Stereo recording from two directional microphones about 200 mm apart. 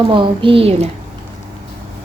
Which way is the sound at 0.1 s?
25° right (ahead or behind).